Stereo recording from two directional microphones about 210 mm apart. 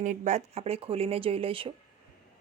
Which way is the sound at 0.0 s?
35° right (ahead or behind).